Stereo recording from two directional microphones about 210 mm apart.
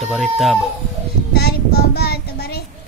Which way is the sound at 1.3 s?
50° left (ahead or behind).